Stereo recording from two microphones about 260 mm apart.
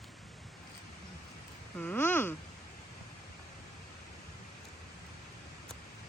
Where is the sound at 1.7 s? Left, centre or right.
Centre.